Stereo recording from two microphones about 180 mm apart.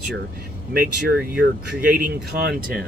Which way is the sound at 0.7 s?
55° right (ahead or behind).